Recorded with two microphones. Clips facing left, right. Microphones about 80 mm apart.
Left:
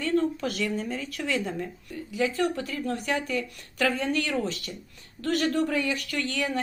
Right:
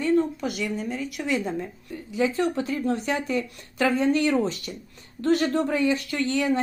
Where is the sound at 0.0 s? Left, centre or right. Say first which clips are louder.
Right 3 dB; centre.